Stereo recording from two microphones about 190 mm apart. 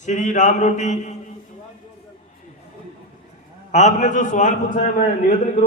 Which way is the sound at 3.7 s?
40° left (ahead or behind).